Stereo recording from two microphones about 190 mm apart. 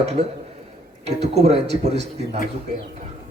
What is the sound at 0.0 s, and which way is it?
Speech, 35° right (ahead or behind).